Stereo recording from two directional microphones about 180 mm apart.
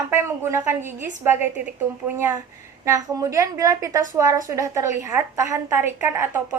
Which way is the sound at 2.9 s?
20° right (ahead or behind).